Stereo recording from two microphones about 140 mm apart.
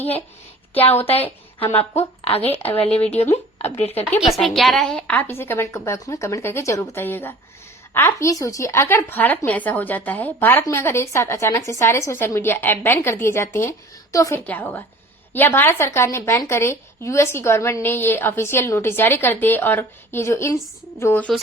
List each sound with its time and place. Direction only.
0.7 s speech: 10° left (ahead or behind)
1.1 s a woman's voice: 45° left (ahead or behind)
1.7 s speech: 15° left (ahead or behind)
3.2 s speech: 45° left (ahead or behind)
4.3 s speech: centre (ahead or behind); by 14.4 s 25° left (ahead or behind)
14.4 s a woman's voice: 10° left (ahead or behind)